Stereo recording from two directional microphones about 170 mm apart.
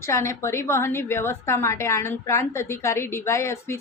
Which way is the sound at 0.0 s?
15° left (ahead or behind).